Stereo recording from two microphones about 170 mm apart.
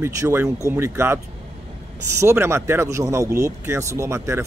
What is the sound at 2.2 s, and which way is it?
Speech, 15° right (ahead or behind).